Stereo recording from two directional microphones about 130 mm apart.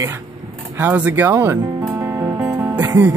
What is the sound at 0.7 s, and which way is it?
Speech, 15° right (ahead or behind).